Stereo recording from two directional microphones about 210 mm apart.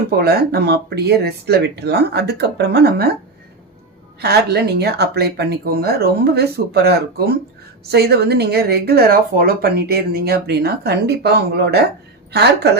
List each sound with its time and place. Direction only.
0.2 s speech: 50° right (ahead or behind)
4.2 s speech: 50° right (ahead or behind)